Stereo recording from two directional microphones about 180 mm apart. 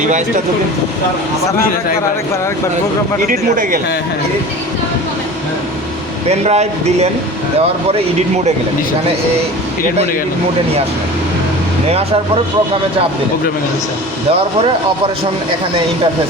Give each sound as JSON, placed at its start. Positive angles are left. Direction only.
{"t": 3.2, "sound": "speech", "side_deg": -50}
{"t": 6.2, "sound": "speech", "side_deg": -35}
{"t": 11.9, "sound": "speech", "side_deg": -35}